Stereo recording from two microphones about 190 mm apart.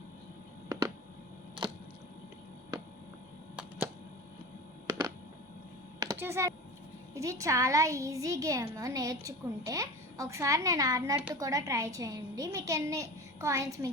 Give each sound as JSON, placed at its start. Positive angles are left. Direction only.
{"t": 3.5, "sound": "a sound", "side_deg": -5}
{"t": 6.0, "sound": "computer keyboard", "side_deg": -15}
{"t": 7.1, "sound": "a woman's voice", "side_deg": -15}